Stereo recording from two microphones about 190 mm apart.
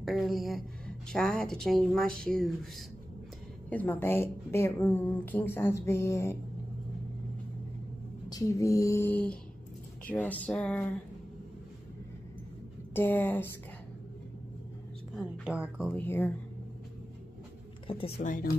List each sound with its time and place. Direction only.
0.0 s a woman's voice: centre (ahead or behind)
3.7 s a woman's voice: 10° left (ahead or behind)
8.3 s a woman's voice: 15° left (ahead or behind)
12.9 s a woman's voice: 10° left (ahead or behind)
15.1 s a woman's voice: centre (ahead or behind)
15.9 s a woman's voice: 10° left (ahead or behind)
17.8 s a woman's voice: 30° left (ahead or behind)